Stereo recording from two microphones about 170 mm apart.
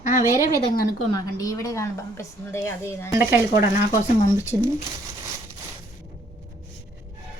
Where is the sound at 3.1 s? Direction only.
15° right (ahead or behind).